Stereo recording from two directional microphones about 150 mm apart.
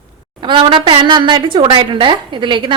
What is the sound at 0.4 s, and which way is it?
A woman's voice, 30° right (ahead or behind).